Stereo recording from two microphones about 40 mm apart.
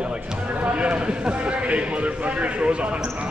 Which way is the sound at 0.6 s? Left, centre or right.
Right.